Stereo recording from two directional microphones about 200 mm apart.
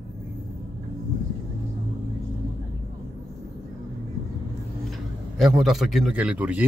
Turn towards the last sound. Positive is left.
turn(degrees=-10)  # may be behind; listen again after turning